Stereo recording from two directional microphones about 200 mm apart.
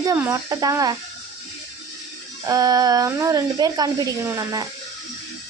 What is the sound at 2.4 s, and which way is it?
A woman's voice, 20° right (ahead or behind).